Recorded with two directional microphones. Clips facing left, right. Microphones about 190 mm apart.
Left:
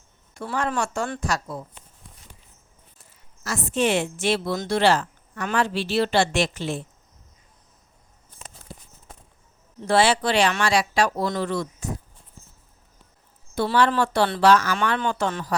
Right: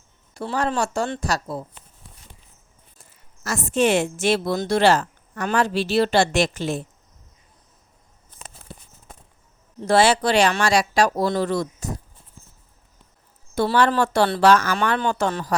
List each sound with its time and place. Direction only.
0.3 s speech: 35° right (ahead or behind)
3.4 s a woman's voice: 45° right (ahead or behind)
9.8 s speech: 40° right (ahead or behind)
13.6 s a woman's voice: 45° right (ahead or behind)